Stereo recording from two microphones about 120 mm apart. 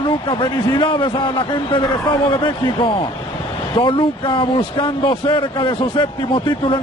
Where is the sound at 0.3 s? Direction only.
35° left (ahead or behind).